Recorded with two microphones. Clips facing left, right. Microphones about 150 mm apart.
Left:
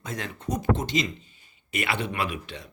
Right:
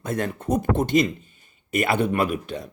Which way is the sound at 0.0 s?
55° right (ahead or behind).